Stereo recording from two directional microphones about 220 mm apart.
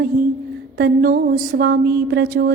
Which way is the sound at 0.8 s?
45° right (ahead or behind).